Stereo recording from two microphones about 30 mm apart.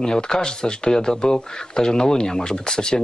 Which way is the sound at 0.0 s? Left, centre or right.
Left.